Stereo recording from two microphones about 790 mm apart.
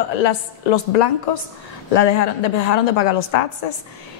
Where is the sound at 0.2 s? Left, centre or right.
Left.